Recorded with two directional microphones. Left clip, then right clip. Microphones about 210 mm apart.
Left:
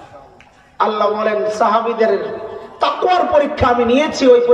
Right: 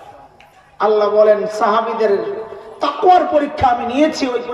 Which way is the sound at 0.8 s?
40° right (ahead or behind).